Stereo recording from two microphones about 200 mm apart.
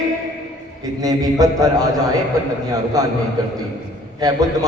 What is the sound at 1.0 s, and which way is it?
Speech, 15° right (ahead or behind).